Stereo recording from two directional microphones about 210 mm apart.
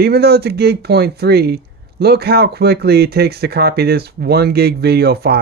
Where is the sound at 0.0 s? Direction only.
50° right (ahead or behind).